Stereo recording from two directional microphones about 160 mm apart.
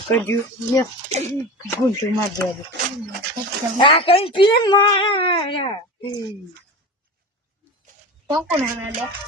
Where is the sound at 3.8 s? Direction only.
35° left (ahead or behind).